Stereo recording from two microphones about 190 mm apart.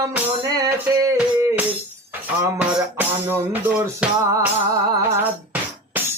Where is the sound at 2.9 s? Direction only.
10° right (ahead or behind).